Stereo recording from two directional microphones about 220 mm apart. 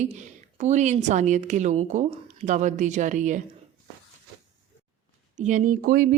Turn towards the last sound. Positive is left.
turn(degrees=-40)  # may be behind; listen again after turning